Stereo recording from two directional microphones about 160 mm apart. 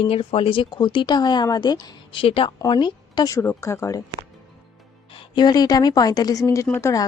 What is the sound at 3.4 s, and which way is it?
Speech, 15° left (ahead or behind).